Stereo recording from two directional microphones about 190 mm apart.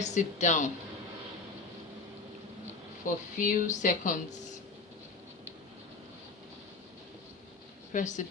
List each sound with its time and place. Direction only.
0.0 s speech: 40° left (ahead or behind)
3.3 s a woman's voice: 45° left (ahead or behind)
7.9 s speech: 40° left (ahead or behind)